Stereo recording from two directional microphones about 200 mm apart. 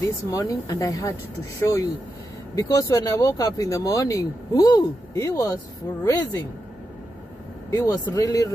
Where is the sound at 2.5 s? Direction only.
15° left (ahead or behind).